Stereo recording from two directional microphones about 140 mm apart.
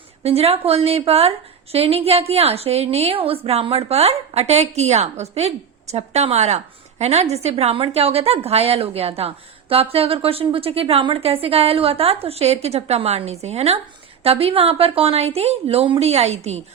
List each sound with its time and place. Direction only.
0.2 s a woman's voice: 45° right (ahead or behind)